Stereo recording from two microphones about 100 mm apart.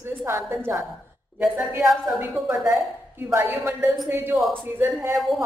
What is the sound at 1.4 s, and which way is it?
A woman's voice, 10° right (ahead or behind).